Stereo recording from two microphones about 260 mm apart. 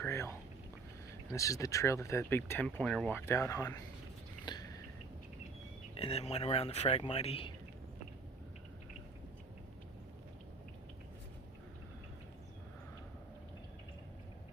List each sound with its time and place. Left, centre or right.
0.0 s speech: centre
4.5 s a sound: centre
5.9 s speech: left